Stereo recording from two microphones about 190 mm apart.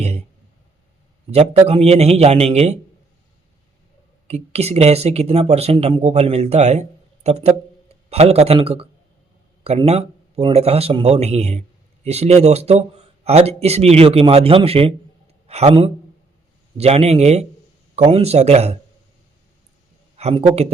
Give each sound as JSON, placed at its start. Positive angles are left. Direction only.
{"t": 1.3, "sound": "speech", "side_deg": -35}
{"t": 4.3, "sound": "a man's voice", "side_deg": -35}
{"t": 20.1, "sound": "speech", "side_deg": -30}